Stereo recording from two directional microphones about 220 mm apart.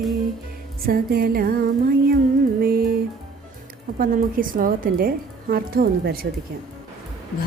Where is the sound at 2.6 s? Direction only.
45° right (ahead or behind).